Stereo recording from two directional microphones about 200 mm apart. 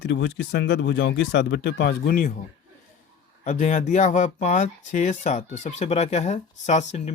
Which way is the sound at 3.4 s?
40° left (ahead or behind).